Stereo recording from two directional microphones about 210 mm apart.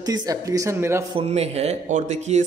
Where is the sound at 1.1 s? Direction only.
30° right (ahead or behind).